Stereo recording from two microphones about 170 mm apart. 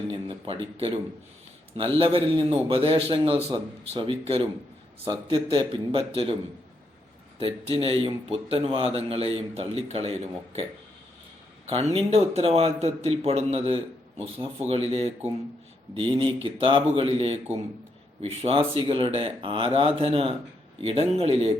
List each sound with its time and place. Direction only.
0.1 s a man's voice: 35° right (ahead or behind)
7.3 s a man's voice: 35° right (ahead or behind)
11.7 s a man's voice: 35° right (ahead or behind)